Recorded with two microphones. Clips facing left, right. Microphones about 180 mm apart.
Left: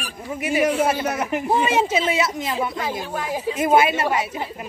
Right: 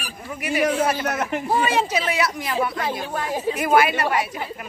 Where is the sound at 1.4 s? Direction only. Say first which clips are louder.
Left 2 dB; 20° left (ahead or behind).